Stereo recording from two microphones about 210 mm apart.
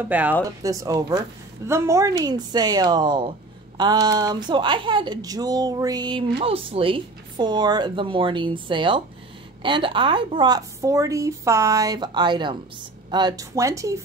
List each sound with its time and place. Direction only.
0.0 s speech: 5° right (ahead or behind)